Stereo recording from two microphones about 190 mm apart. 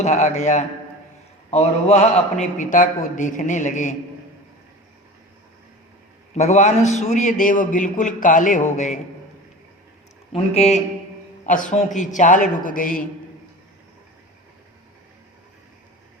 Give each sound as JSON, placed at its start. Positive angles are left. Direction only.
{"t": 0.0, "sound": "a man's voice", "side_deg": 35}
{"t": 6.3, "sound": "a man's voice", "side_deg": 35}
{"t": 10.3, "sound": "a man's voice", "side_deg": 35}